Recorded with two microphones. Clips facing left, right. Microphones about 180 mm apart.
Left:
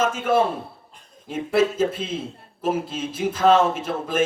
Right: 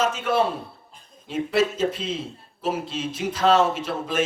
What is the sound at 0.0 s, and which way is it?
A man's voice, 50° left (ahead or behind).